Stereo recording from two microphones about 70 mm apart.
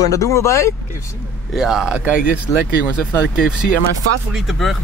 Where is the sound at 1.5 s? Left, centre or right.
Centre.